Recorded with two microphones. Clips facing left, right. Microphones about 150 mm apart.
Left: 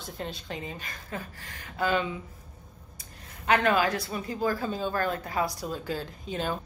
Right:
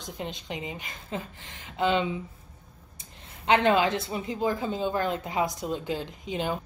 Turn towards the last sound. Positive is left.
turn(degrees=-15)  # may be behind; listen again after turning